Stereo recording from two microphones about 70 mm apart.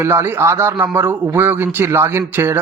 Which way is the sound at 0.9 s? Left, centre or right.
Right.